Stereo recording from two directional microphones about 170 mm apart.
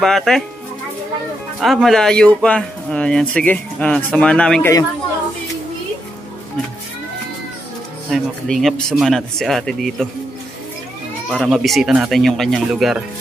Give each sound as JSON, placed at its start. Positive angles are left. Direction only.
{"t": 0.0, "sound": "speech", "side_deg": 0}
{"t": 1.6, "sound": "speech", "side_deg": 0}
{"t": 8.1, "sound": "speech", "side_deg": 0}
{"t": 11.2, "sound": "speech", "side_deg": 0}